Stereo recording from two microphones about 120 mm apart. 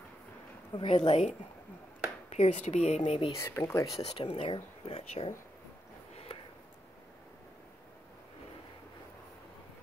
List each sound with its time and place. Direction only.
0.7 s a woman's voice: 50° left (ahead or behind)
3.1 s speech: 55° left (ahead or behind)
3.3 s speech: 25° left (ahead or behind)
3.9 s speech: 55° left (ahead or behind)